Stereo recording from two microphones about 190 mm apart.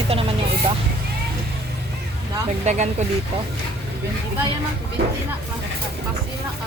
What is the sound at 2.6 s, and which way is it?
Speech, 35° right (ahead or behind).